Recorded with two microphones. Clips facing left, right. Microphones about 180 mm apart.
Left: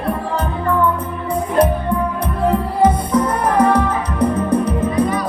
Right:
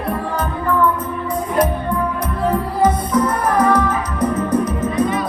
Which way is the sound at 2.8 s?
30° left (ahead or behind).